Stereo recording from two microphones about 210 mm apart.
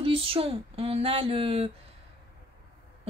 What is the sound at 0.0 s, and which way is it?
Speech, 25° right (ahead or behind).